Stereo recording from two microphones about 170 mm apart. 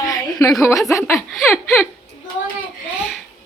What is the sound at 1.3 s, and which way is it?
Speech, centre (ahead or behind).